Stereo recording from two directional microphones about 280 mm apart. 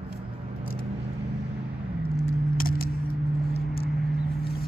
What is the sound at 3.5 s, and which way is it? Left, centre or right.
Vehicle, left.